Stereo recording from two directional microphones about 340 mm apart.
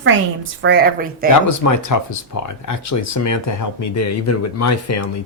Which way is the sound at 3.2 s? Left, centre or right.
Left.